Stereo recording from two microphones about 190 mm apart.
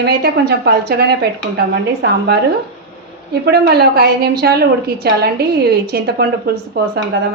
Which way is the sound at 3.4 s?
55° right (ahead or behind).